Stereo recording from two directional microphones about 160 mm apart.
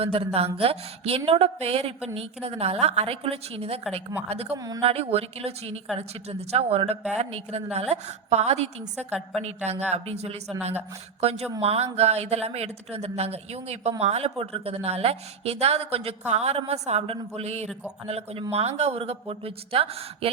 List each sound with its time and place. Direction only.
0.0 s a woman's voice: 35° right (ahead or behind)
4.5 s speech: 20° right (ahead or behind)
4.8 s a woman's voice: 40° right (ahead or behind)
9.0 s a woman's voice: 10° right (ahead or behind)
9.9 s a woman's voice: 40° right (ahead or behind)